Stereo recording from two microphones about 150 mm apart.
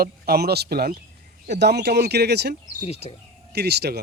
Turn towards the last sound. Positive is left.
turn(degrees=-90)